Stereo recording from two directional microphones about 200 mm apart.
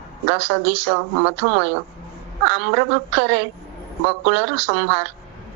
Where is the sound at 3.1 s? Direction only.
60° right (ahead or behind).